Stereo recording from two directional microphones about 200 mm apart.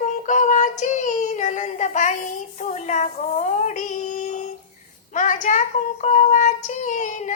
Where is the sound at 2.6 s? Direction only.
35° left (ahead or behind).